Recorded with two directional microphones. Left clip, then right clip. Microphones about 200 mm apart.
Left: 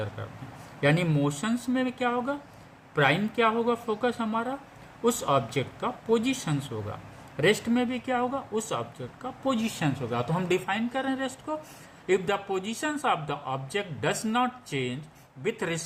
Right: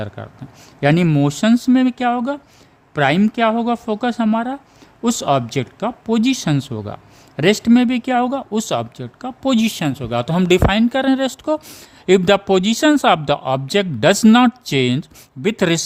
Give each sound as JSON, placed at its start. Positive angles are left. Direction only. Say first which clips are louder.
{"t": 0.8, "sound": "speech", "louder": "right 9 dB", "side_deg": -60}